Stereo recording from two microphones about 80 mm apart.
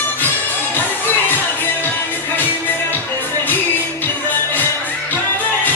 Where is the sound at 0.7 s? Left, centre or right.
Left.